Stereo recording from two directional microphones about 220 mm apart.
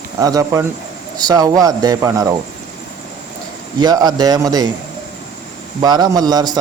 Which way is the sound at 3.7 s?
20° right (ahead or behind).